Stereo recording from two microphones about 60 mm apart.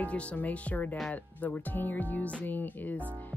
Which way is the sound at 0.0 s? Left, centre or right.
Left.